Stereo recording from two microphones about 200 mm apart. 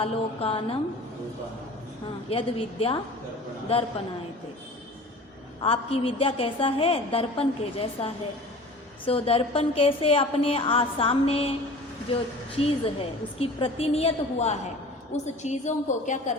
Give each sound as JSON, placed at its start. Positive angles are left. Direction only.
{"t": 0.0, "sound": "a woman's voice", "side_deg": 30}
{"t": 2.3, "sound": "a woman's voice", "side_deg": 30}
{"t": 5.6, "sound": "a woman's voice", "side_deg": 30}
{"t": 12.5, "sound": "a woman's voice", "side_deg": 30}